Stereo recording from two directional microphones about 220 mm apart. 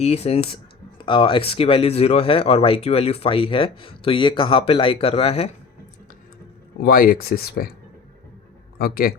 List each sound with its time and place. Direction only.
0.0 s speech: 30° left (ahead or behind)
6.7 s speech: 45° left (ahead or behind)
8.8 s speech: 40° left (ahead or behind)